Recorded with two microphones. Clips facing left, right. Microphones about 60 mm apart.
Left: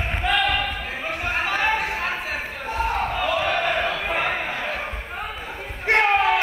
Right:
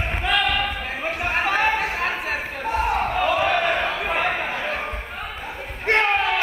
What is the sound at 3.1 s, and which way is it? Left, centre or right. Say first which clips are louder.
Battle cry: right 3 dB; right.